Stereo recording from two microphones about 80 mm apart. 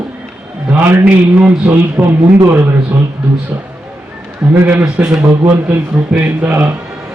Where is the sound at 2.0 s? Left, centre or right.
Right.